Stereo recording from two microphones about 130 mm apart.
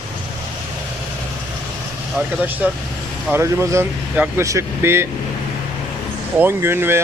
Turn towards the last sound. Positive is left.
turn(degrees=-20)  # may be behind; listen again after turning